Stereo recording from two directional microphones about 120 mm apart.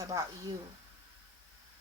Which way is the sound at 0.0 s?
30° right (ahead or behind).